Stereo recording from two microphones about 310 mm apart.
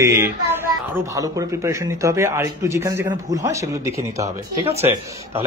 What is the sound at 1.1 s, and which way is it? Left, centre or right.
Speech, centre.